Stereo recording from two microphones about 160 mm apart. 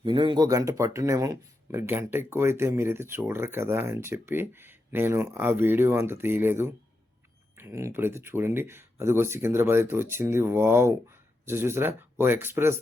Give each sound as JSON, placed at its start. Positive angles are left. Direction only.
{"t": 0.0, "sound": "speech", "side_deg": -30}